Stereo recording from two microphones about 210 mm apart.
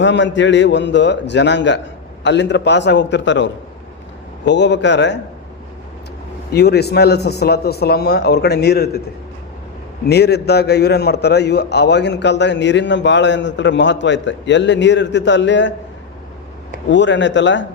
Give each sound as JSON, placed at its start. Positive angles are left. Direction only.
{"t": 0.0, "sound": "a man's voice", "side_deg": 60}
{"t": 6.5, "sound": "speech", "side_deg": 50}
{"t": 10.1, "sound": "a man's voice", "side_deg": 50}
{"t": 16.9, "sound": "a man's voice", "side_deg": 60}